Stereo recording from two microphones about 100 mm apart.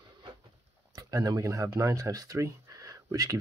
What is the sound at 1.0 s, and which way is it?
Speech, 35° right (ahead or behind).